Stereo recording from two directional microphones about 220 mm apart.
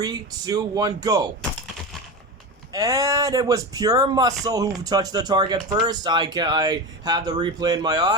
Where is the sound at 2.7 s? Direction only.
15° right (ahead or behind).